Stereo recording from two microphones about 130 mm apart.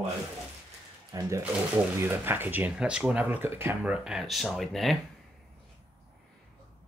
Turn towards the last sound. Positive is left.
turn(degrees=0)  # may be behind; listen again after turning